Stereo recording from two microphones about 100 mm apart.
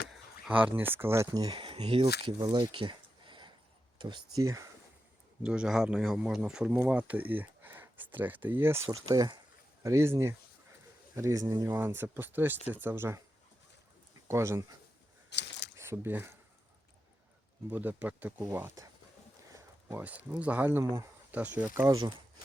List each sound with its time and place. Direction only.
0.7 s speech: 20° right (ahead or behind)
1.3 s speech: 45° right (ahead or behind); by 2.3 s 65° right (ahead or behind)
2.4 s a sound: 55° right (ahead or behind)
3.9 s speech: 50° right (ahead or behind)
5.4 s speech: 10° right (ahead or behind); by 8.9 s 25° right (ahead or behind)
8.9 s speech: 45° right (ahead or behind)
9.8 s speech: 30° right (ahead or behind)
14.3 s speech: 30° right (ahead or behind)
17.7 s speech: 15° right (ahead or behind)
19.9 s speech: 15° right (ahead or behind)
21.8 s speech: 35° right (ahead or behind)